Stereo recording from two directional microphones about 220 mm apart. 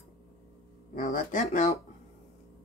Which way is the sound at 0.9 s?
35° left (ahead or behind).